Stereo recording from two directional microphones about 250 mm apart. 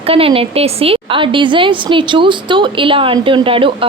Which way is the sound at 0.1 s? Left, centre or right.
Right.